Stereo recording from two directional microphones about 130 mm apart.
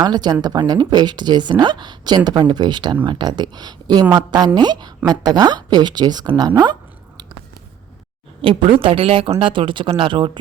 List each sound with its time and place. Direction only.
0.0 s a woman's voice: 35° right (ahead or behind)
8.4 s a woman's voice: 45° right (ahead or behind)